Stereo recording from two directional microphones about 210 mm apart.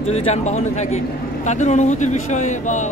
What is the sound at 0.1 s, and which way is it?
Speech, 30° left (ahead or behind).